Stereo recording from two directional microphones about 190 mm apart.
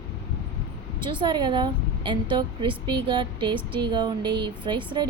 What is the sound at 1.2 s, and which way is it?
A woman's voice, 25° right (ahead or behind).